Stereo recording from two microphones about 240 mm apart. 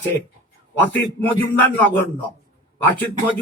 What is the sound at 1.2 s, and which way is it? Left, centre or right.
A man's voice, centre.